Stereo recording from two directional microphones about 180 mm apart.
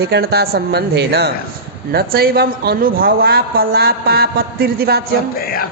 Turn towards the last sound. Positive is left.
turn(degrees=55)  # may be behind; listen again after turning